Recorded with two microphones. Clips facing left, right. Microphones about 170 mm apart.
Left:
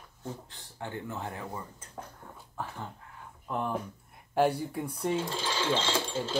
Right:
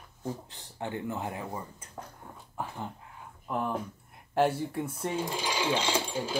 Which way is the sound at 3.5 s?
Centre (ahead or behind).